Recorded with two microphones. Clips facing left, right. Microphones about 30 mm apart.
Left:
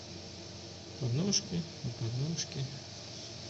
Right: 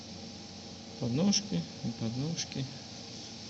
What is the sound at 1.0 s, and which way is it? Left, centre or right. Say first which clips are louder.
Speech: right 5 dB; right.